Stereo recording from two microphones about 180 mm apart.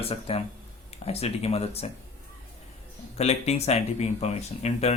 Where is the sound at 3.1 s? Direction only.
35° left (ahead or behind).